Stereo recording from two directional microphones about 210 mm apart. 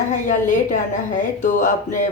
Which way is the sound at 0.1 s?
35° left (ahead or behind).